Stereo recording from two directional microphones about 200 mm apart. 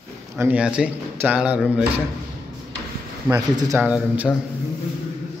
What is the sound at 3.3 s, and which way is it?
Speech, 15° right (ahead or behind).